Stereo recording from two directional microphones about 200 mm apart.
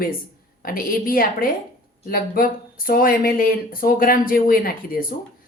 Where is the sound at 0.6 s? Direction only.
45° left (ahead or behind).